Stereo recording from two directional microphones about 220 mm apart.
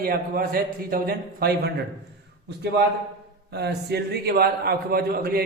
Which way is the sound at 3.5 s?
50° right (ahead or behind).